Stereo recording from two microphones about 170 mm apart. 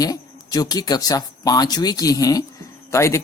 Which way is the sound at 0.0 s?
20° left (ahead or behind).